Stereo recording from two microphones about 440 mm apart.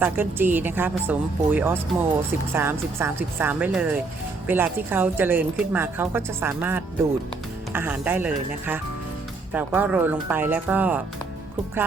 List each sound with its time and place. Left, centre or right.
0.0 s a woman's voice: centre